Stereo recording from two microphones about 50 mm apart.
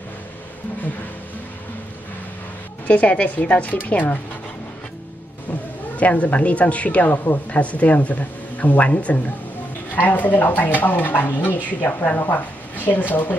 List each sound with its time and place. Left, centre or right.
2.9 s speech: left
5.5 s speech: left